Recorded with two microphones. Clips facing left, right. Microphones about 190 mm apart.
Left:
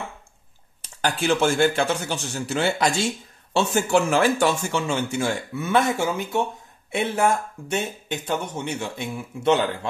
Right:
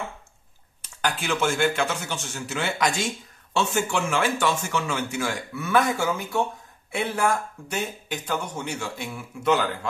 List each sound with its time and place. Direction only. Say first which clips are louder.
0.8 s speech: left 5 dB; 30° left (ahead or behind)